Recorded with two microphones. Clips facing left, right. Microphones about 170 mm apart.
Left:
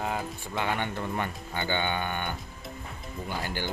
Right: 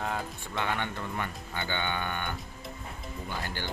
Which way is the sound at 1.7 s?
20° left (ahead or behind).